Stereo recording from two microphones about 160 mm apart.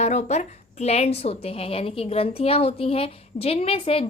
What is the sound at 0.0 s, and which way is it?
A woman's voice, 45° left (ahead or behind).